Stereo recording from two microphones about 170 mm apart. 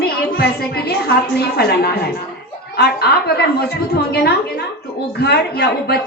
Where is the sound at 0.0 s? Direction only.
65° left (ahead or behind).